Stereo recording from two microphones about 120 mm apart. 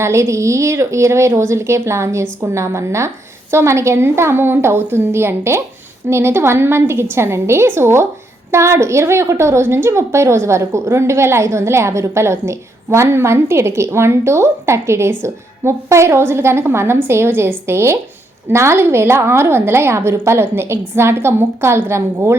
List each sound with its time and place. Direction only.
0.0 s a woman's voice: 25° right (ahead or behind)